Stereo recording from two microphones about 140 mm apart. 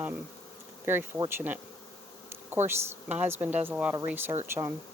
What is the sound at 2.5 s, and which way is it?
Speech, 15° right (ahead or behind).